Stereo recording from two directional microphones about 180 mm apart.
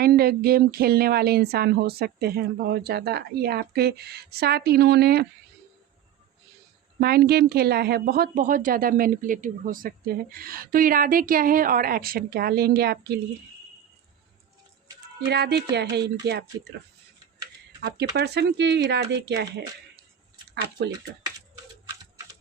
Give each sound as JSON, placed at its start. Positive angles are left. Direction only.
{"t": 0.0, "sound": "speech", "side_deg": -55}
{"t": 7.0, "sound": "speech", "side_deg": -60}
{"t": 15.3, "sound": "speech", "side_deg": -70}
{"t": 18.2, "sound": "speech", "side_deg": -70}